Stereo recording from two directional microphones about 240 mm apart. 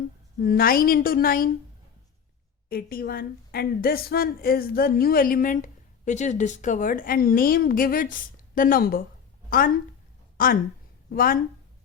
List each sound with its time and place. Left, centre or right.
0.3 s a woman's voice: left
2.6 s a woman's voice: left